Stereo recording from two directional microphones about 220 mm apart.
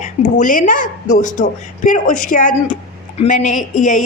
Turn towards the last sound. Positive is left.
turn(degrees=35)  # may be behind; listen again after turning